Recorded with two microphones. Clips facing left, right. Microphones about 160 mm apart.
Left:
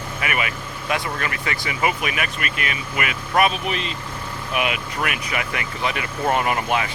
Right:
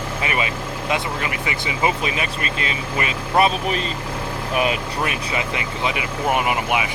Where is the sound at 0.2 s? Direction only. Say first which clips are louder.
Right 1 dB; 25° right (ahead or behind).